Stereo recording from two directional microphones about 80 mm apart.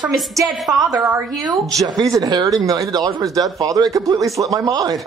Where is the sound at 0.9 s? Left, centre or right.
Right.